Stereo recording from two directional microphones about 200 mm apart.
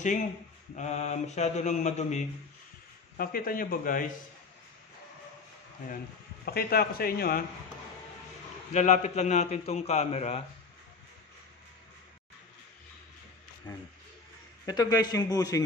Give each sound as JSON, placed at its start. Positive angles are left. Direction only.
{"t": 0.7, "sound": "a man's voice", "side_deg": 35}
{"t": 3.2, "sound": "a man's voice", "side_deg": 45}
{"t": 6.4, "sound": "a man's voice", "side_deg": 50}
{"t": 8.7, "sound": "a man's voice", "side_deg": 35}
{"t": 14.7, "sound": "a man's voice", "side_deg": 20}